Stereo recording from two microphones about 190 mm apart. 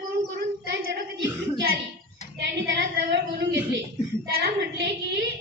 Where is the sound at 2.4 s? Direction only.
65° right (ahead or behind).